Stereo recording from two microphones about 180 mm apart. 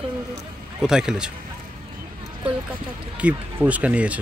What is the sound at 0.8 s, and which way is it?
Speech, 5° right (ahead or behind).